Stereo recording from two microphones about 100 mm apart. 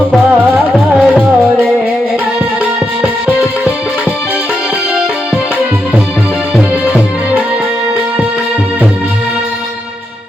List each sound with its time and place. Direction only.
0.9 s music: 10° right (ahead or behind)
3.0 s music: 10° right (ahead or behind)